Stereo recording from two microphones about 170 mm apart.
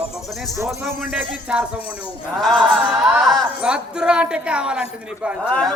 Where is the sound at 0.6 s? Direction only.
5° right (ahead or behind).